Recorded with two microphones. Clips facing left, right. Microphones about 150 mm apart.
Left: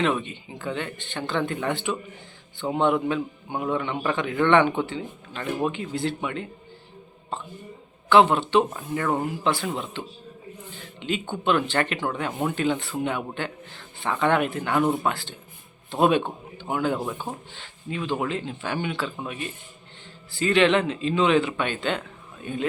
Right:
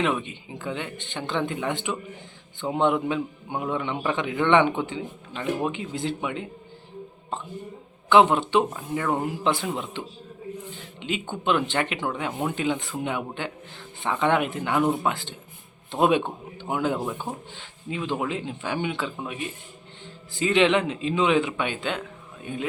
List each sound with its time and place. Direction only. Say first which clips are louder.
0.0 s a man's voice: left 1 dB; 15° right (ahead or behind)
8.1 s a man's voice: even; 15° right (ahead or behind)
8.7 s speech: even; 5° right (ahead or behind)
9.1 s a man's voice: even; 20° right (ahead or behind)